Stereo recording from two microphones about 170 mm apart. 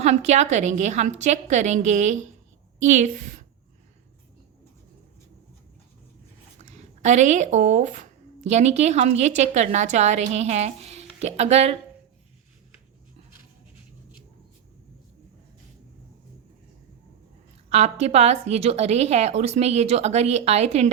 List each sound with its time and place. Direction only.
0.0 s a woman's voice: 40° right (ahead or behind)
6.6 s a woman's voice: 45° right (ahead or behind)
17.7 s a woman's voice: 40° right (ahead or behind)